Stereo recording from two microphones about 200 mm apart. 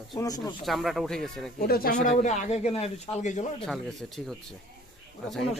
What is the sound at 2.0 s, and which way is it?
Speech, 35° left (ahead or behind).